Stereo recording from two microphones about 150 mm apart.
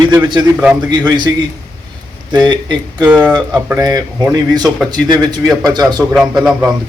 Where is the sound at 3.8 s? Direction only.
25° right (ahead or behind).